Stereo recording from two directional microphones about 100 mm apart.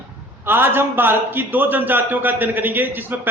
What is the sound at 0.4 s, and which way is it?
A man's voice, 20° right (ahead or behind).